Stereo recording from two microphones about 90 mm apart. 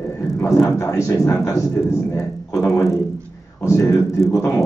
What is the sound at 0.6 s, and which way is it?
Speech, 35° left (ahead or behind).